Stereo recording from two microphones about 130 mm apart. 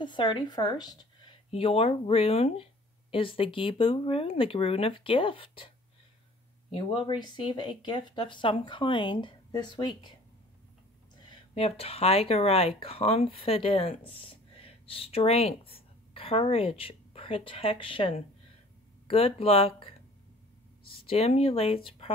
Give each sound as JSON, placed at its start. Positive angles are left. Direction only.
{"t": 0.0, "sound": "speech", "side_deg": 35}
{"t": 1.5, "sound": "speech", "side_deg": 50}
{"t": 6.7, "sound": "speech", "side_deg": 40}
{"t": 11.5, "sound": "speech", "side_deg": 50}
{"t": 21.1, "sound": "speech", "side_deg": 50}